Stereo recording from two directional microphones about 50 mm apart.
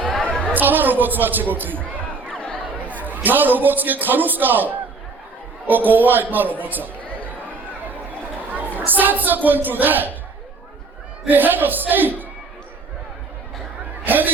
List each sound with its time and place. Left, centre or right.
0.2 s chatter: centre
0.5 s a man's voice: right
2.3 s chatter: left
2.8 s a man's voice: right
8.5 s a sound: right
8.9 s a man's voice: right
11.3 s a man's voice: right
14.0 s a sound: right